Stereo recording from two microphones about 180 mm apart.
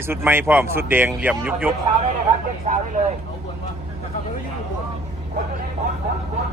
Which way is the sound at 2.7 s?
40° right (ahead or behind).